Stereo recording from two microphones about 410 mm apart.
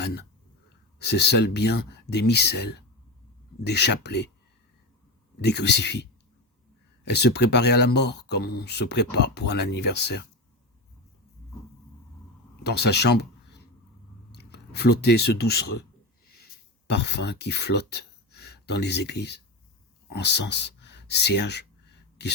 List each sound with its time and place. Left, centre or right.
0.0 s speech: left
5.4 s speech: left
12.6 s speech: left
16.2 s a sound: left
20.1 s speech: left